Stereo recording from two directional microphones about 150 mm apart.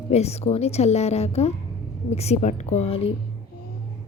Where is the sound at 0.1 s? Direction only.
45° left (ahead or behind).